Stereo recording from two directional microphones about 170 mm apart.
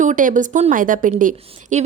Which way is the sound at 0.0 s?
50° right (ahead or behind).